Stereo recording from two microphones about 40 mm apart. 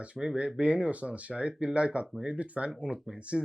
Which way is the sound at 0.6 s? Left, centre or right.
Right.